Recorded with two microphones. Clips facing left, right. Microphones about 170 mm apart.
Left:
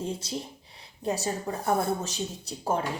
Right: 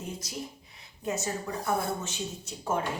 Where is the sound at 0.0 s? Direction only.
30° left (ahead or behind).